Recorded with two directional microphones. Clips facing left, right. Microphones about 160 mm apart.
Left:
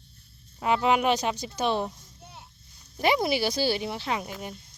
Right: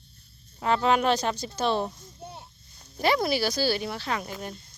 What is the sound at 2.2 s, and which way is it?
Children playing, 35° right (ahead or behind).